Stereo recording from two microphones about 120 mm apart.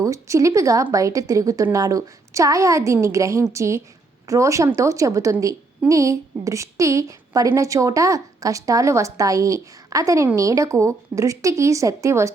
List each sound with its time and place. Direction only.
0.0 s a woman's voice: 25° right (ahead or behind)